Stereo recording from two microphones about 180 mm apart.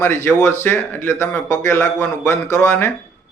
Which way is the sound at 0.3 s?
15° left (ahead or behind).